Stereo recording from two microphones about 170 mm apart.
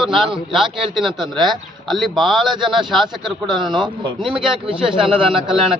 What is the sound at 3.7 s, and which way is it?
Speech, 30° right (ahead or behind).